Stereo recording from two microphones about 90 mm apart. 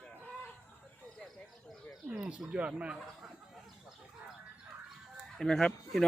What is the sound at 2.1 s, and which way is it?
Speech, 10° right (ahead or behind).